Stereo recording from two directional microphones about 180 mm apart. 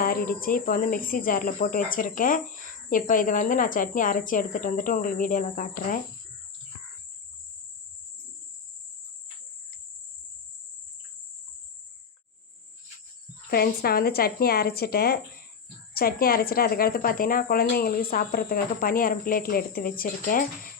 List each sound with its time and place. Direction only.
0.0 s speech: 55° left (ahead or behind)
13.5 s speech: 55° left (ahead or behind)